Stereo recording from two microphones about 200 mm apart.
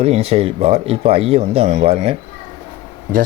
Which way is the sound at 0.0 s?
30° right (ahead or behind).